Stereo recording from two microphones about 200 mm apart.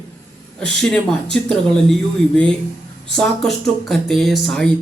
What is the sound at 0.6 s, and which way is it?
Speech, 5° left (ahead or behind).